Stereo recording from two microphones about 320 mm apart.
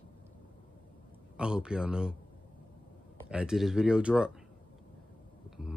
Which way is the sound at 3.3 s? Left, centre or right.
Centre.